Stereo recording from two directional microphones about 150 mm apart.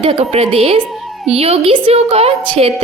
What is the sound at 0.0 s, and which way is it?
A woman's voice, 40° right (ahead or behind).